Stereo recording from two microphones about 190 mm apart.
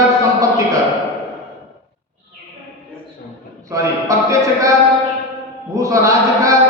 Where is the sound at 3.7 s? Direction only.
15° right (ahead or behind).